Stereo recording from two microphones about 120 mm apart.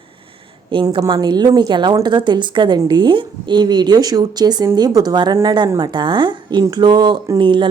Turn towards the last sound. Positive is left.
turn(degrees=-40)  # may be behind; listen again after turning